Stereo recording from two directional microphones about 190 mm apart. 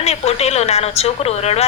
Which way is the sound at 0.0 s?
35° left (ahead or behind).